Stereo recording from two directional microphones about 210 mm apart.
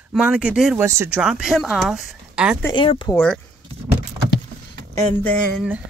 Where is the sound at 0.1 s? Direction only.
5° right (ahead or behind).